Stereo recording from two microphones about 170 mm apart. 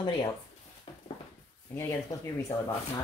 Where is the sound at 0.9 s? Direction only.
30° left (ahead or behind).